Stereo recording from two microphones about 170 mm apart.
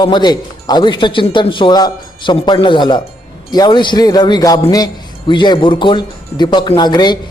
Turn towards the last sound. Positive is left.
turn(degrees=25)  # may be behind; listen again after turning